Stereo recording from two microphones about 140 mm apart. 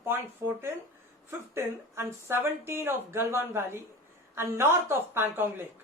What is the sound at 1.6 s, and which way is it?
A woman's voice, 20° right (ahead or behind).